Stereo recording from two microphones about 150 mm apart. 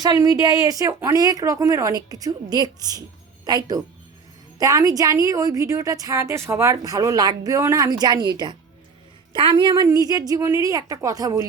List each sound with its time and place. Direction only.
0.0 s a woman's voice: 25° right (ahead or behind)